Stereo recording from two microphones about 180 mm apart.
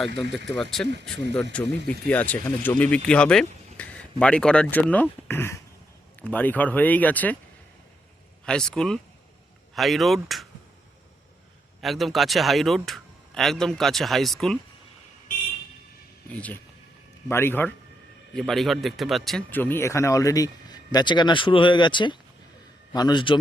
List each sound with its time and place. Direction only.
0.6 s speech: centre (ahead or behind)
8.4 s speech: 5° left (ahead or behind)
11.8 s speech: centre (ahead or behind)
16.3 s a man's voice: 10° left (ahead or behind); by 23.4 s 25° left (ahead or behind)